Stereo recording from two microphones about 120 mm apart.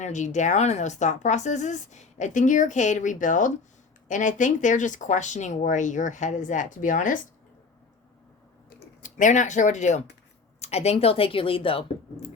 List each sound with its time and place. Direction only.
0.0 s speech: 80° left
9.0 s speech: 90° left
10.6 s speech: 60° left (ahead or behind)